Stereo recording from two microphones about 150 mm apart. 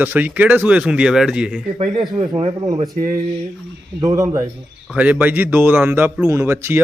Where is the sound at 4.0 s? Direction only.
20° right (ahead or behind).